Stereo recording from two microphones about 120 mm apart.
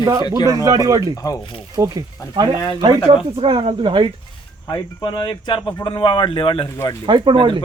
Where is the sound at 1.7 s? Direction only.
30° right (ahead or behind).